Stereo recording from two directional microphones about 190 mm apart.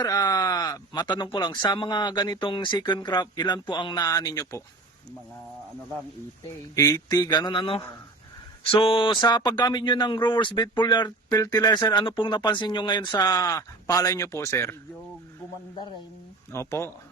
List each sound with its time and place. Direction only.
0.0 s speech: 20° left (ahead or behind)
6.7 s speech: 20° left (ahead or behind)
16.5 s speech: 15° left (ahead or behind)